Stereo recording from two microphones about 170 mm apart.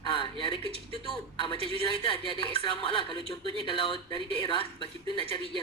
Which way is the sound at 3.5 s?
30° right (ahead or behind).